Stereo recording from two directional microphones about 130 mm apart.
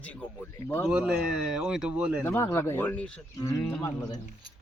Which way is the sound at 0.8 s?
5° right (ahead or behind).